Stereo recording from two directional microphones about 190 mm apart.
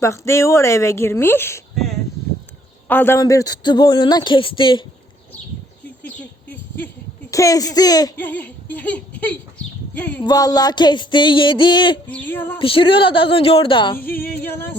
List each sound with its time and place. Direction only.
0.0 s a woman's voice: 15° left (ahead or behind)
1.7 s a sound: centre (ahead or behind)
2.9 s a man's voice: 10° left (ahead or behind)
6.0 s a sound: 10° left (ahead or behind)
8.2 s a sound: 10° left (ahead or behind)
9.9 s a woman's voice: 10° left (ahead or behind)
10.2 s a man's voice: 20° left (ahead or behind)
12.0 s a woman's voice: 10° left (ahead or behind)
12.5 s a man's voice: 30° left (ahead or behind)
14.2 s a woman's voice: 10° left (ahead or behind)